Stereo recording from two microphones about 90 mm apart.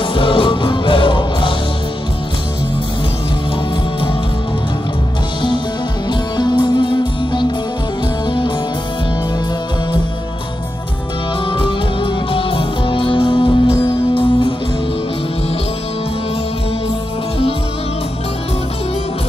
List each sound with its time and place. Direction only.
0.0 s music: 75° left (ahead or behind)
6.3 s music: 60° left (ahead or behind)
11.5 s music: 75° left (ahead or behind)